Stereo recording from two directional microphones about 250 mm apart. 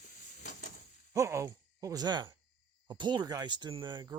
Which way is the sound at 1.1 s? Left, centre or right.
Centre.